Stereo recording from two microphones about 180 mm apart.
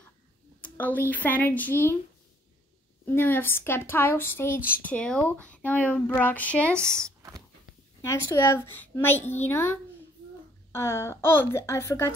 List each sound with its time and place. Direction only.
0.6 s speech: 10° left (ahead or behind)
3.1 s speech: 10° left (ahead or behind)
6.8 s a sound: 15° right (ahead or behind)
8.0 s speech: 15° left (ahead or behind)